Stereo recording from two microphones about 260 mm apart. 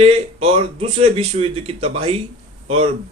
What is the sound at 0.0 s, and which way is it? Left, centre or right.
Speech, right.